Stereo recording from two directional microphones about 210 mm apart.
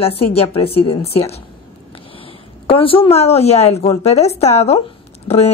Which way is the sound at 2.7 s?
25° left (ahead or behind).